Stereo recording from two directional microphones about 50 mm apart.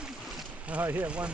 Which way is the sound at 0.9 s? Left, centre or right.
Right.